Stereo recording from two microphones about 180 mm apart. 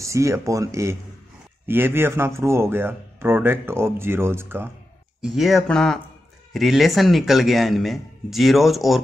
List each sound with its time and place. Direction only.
0.0 s speech: 15° right (ahead or behind)
5.2 s speech: centre (ahead or behind)